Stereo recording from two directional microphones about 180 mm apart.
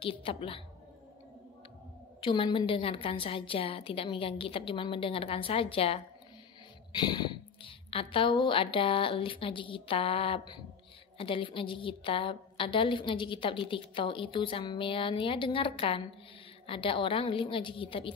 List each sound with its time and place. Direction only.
0.0 s a woman's voice: 30° left (ahead or behind)
2.1 s a woman's voice: 30° left (ahead or behind)